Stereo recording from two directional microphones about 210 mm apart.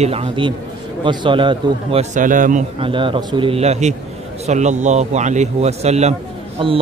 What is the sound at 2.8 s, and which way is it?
A man's voice, 25° right (ahead or behind).